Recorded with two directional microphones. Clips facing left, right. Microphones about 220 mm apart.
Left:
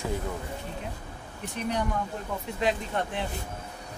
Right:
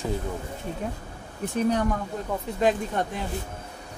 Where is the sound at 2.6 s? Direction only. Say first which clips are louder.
Right 4 dB; 45° right (ahead or behind).